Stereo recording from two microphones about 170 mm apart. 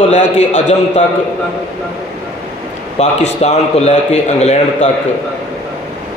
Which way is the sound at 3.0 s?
40° left (ahead or behind).